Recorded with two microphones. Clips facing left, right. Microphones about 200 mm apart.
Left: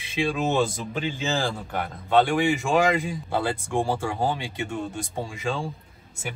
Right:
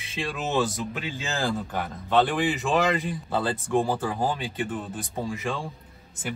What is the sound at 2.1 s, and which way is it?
A man's voice, 15° left (ahead or behind).